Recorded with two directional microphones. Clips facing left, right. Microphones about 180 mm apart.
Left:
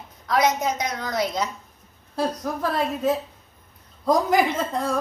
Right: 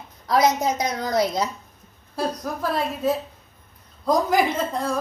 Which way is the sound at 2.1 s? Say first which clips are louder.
Left 1 dB; 5° right (ahead or behind).